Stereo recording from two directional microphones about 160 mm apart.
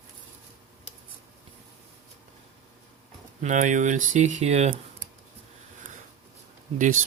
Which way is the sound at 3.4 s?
50° right (ahead or behind).